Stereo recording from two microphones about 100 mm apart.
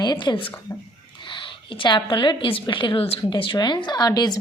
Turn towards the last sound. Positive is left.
turn(degrees=40)  # may be behind; listen again after turning